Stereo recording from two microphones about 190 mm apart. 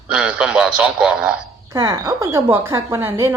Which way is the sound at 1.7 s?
15° right (ahead or behind).